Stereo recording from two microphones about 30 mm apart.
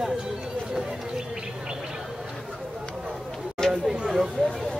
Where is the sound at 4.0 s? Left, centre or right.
Centre.